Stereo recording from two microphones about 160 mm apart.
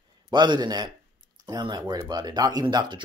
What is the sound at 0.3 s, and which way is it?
Speech, 30° right (ahead or behind).